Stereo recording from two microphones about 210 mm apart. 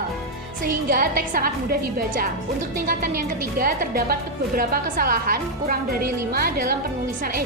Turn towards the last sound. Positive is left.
turn(degrees=-45)  # may be behind; listen again after turning